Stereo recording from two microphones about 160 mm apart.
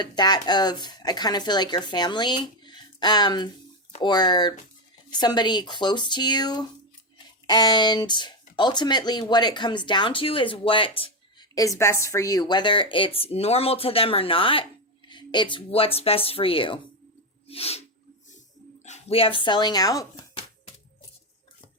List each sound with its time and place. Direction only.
0.0 s speech: 25° left (ahead or behind)
11.5 s speech: 20° left (ahead or behind); by 17.8 s 40° left (ahead or behind)
18.9 s speech: 40° left (ahead or behind); by 20.4 s 20° left (ahead or behind)